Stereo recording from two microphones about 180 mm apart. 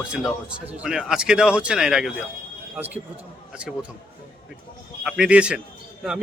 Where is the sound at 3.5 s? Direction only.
5° right (ahead or behind).